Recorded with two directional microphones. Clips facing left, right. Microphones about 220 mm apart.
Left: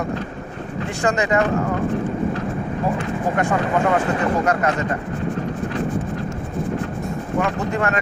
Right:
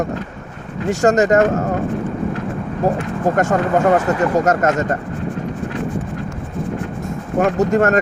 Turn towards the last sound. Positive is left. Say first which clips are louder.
# right 7 dB
turn(degrees=-45)  # may be behind; listen again after turning